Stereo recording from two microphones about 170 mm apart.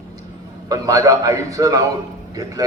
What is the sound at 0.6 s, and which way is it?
A man's voice, 20° right (ahead or behind).